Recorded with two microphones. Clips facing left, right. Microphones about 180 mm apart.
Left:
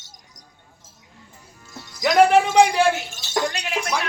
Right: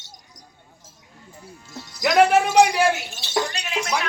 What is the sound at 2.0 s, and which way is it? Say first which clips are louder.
Music: left 1 dB; centre (ahead or behind).